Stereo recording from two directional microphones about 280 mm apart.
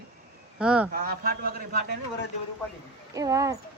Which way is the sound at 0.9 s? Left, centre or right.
Right.